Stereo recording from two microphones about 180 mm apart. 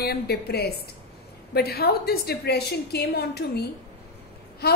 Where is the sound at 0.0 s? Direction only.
60° left (ahead or behind).